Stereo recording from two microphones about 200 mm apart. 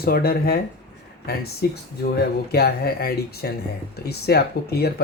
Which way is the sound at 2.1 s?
50° left (ahead or behind).